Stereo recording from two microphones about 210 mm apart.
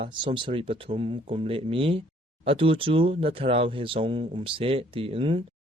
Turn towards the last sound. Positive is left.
turn(degrees=-25)  # may be behind; listen again after turning